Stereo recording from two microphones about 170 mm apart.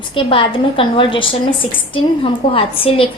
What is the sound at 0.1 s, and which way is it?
A woman's voice, 30° left (ahead or behind).